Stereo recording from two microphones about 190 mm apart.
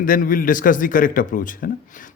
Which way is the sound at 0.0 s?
45° left (ahead or behind).